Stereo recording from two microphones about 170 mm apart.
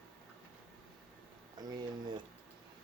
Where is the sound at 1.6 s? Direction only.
25° right (ahead or behind).